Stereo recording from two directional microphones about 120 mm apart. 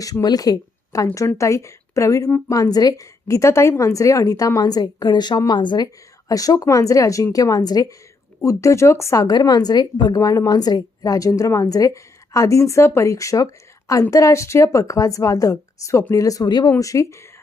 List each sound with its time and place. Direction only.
0.0 s a woman's voice: 30° left (ahead or behind)